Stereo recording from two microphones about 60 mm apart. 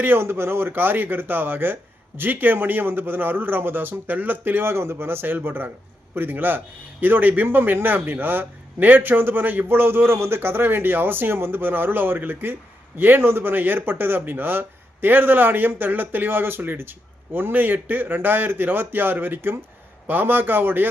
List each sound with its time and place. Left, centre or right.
0.0 s speech: right